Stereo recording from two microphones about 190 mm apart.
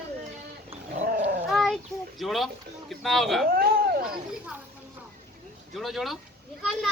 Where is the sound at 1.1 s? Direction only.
55° right (ahead or behind).